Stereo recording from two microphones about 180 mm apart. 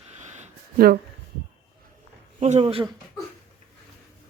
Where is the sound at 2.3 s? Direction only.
35° right (ahead or behind).